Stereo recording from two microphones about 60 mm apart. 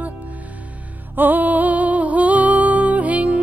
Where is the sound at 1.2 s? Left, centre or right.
Right.